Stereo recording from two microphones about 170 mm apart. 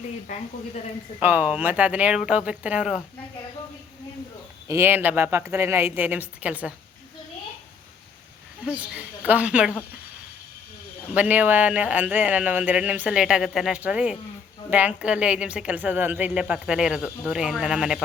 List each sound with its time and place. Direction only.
0.3 s a woman's voice: 45° left (ahead or behind)
1.2 s a woman's voice: 10° right (ahead or behind)
4.7 s a woman's voice: 10° right (ahead or behind)
8.9 s a woman's voice: 10° right (ahead or behind)
11.1 s a woman's voice: 10° right (ahead or behind)